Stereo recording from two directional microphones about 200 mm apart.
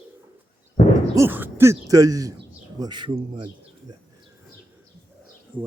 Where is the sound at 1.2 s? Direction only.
10° right (ahead or behind).